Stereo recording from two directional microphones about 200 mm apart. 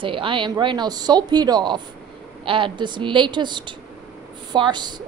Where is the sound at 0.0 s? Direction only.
25° right (ahead or behind).